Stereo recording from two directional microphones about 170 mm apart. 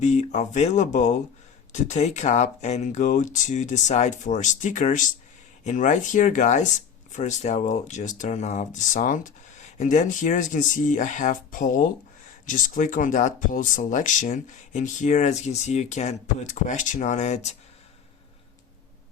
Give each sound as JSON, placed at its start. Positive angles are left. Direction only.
{"t": 0.0, "sound": "speech", "side_deg": 45}